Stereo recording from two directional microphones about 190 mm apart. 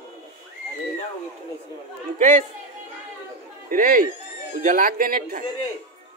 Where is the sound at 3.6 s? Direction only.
45° right (ahead or behind).